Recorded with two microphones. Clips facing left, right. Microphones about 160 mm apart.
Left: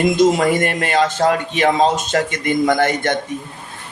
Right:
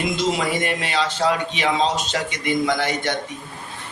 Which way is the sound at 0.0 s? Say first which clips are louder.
Left 8 dB; 50° left (ahead or behind).